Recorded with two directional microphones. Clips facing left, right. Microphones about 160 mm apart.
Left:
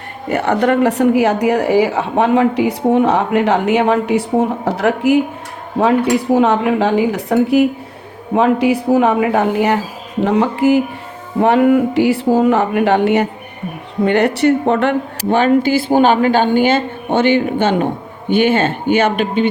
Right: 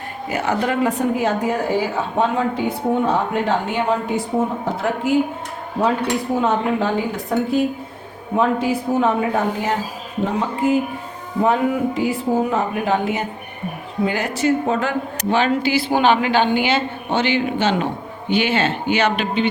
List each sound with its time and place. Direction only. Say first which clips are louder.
0.3 s speech: left 7 dB; 65° left (ahead or behind); by 5.2 s 80° left
6.3 s speech: left 6 dB; 75° left (ahead or behind); by 19.5 s 50° left (ahead or behind)